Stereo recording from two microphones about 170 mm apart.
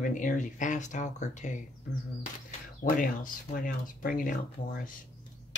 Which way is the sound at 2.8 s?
55° left (ahead or behind).